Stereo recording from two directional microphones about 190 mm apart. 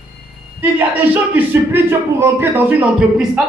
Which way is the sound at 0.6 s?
10° right (ahead or behind).